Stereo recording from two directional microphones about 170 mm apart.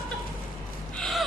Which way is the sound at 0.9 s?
Centre (ahead or behind).